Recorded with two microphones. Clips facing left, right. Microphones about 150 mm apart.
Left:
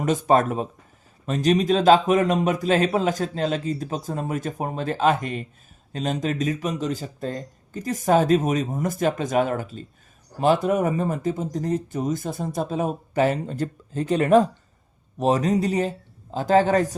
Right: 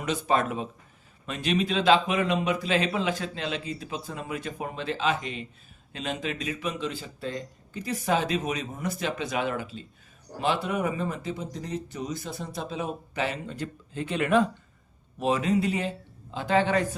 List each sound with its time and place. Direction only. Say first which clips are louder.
0.0 s a man's voice: left 6 dB; 45° left (ahead or behind)